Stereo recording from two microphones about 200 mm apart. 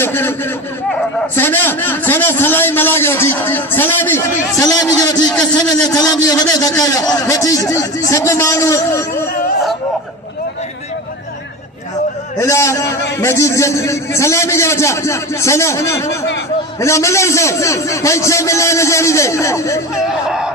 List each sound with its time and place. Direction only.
0.0 s a man's voice: 10° left (ahead or behind)
1.4 s a man's voice: 10° left (ahead or behind)
5.3 s speech: 5° left (ahead or behind)
5.5 s a man's voice: 20° left (ahead or behind)
12.4 s a man's voice: 15° left (ahead or behind)
20.1 s speech: 5° right (ahead or behind)